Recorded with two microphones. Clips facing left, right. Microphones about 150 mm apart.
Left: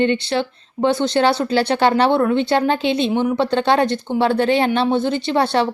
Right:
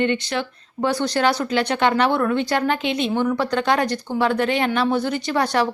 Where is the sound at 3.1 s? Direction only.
20° left (ahead or behind).